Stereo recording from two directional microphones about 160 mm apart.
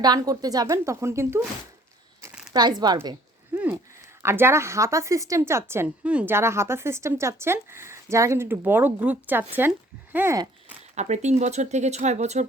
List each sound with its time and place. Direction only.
0.0 s a woman's voice: 25° right (ahead or behind)
2.5 s a woman's voice: 25° right (ahead or behind)
3.5 s a sound: 15° right (ahead or behind)
4.2 s speech: 15° right (ahead or behind)
10.9 s speech: 45° right (ahead or behind)